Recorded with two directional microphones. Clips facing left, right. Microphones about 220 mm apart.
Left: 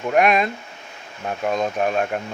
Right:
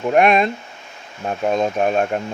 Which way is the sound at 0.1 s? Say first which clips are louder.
Right 3 dB; 25° right (ahead or behind).